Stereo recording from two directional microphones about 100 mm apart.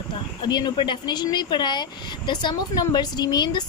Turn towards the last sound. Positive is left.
turn(degrees=45)  # may be behind; listen again after turning